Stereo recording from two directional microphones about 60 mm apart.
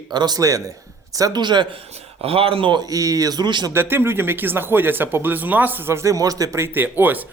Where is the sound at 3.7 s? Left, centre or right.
Right.